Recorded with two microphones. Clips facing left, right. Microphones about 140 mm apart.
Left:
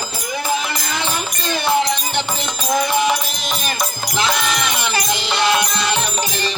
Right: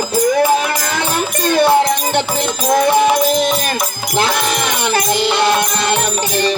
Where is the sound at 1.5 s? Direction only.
50° right (ahead or behind).